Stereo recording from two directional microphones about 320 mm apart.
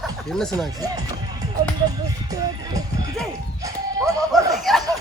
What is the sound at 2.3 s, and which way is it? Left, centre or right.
Speech, centre.